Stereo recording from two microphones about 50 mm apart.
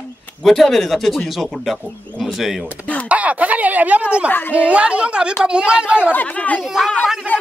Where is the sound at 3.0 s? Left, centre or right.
Right.